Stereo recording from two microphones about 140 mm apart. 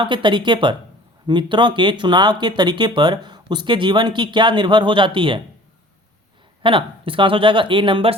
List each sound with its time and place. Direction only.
0.0 s speech: 35° right (ahead or behind)
6.6 s speech: 40° right (ahead or behind)